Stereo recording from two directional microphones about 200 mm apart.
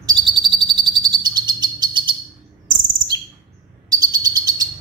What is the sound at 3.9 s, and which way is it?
Bird, 20° right (ahead or behind).